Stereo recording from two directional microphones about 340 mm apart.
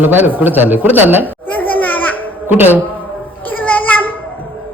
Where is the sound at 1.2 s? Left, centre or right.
Centre.